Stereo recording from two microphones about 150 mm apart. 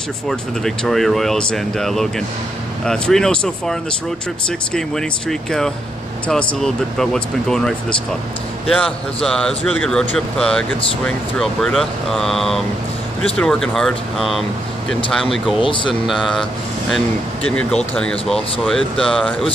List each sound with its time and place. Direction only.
0.3 s speech: centre (ahead or behind)
15.6 s speech: 35° left (ahead or behind)
15.9 s speech: centre (ahead or behind)